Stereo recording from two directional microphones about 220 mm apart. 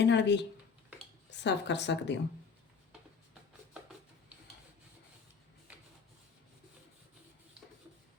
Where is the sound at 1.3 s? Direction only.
50° left (ahead or behind).